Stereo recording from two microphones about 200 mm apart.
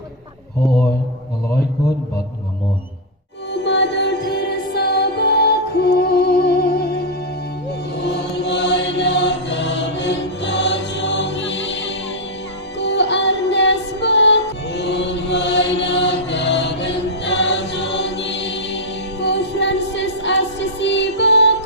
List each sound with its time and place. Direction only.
3.5 s mantra: 60° left (ahead or behind)
4.3 s music: 60° left (ahead or behind)
8.0 s mantra: 60° left (ahead or behind)
12.8 s music: 60° left (ahead or behind)